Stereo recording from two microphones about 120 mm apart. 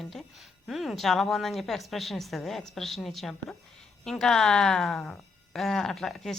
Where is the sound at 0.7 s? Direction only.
Centre (ahead or behind).